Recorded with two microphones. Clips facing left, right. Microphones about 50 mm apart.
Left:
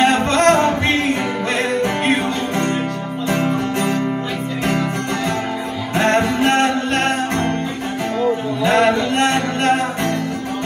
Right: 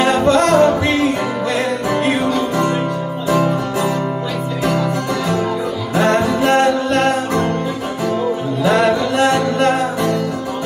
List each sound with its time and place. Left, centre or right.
0.0 s music: left
5.9 s music: left
8.6 s music: left